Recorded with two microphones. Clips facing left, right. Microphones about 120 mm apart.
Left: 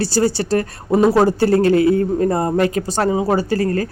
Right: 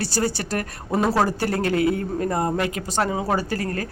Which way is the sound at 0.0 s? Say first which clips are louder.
Left 7 dB; 30° left (ahead or behind).